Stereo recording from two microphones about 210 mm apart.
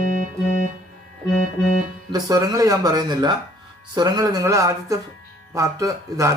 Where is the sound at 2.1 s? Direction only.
20° right (ahead or behind).